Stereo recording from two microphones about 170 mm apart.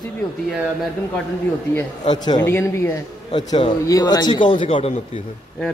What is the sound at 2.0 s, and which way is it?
Speech, 25° left (ahead or behind).